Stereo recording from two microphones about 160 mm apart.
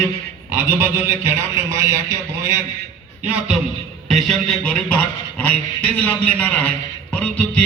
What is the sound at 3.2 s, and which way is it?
A man's voice, 10° right (ahead or behind).